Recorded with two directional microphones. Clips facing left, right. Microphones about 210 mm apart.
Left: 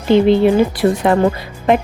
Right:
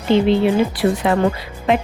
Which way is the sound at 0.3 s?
50° left (ahead or behind).